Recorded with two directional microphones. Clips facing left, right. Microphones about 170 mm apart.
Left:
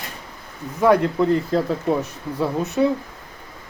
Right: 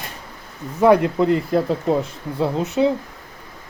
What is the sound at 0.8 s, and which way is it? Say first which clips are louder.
Speech: right 2 dB; 15° right (ahead or behind).